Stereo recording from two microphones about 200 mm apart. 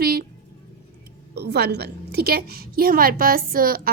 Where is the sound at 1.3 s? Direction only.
55° right (ahead or behind).